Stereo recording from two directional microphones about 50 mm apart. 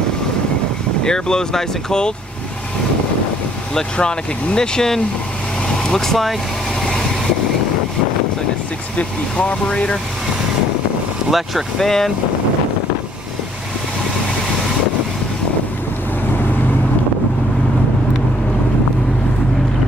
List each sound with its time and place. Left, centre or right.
1.0 s speech: centre
3.7 s speech: centre
6.8 s vehicle: centre
8.9 s speech: left
11.2 s speech: centre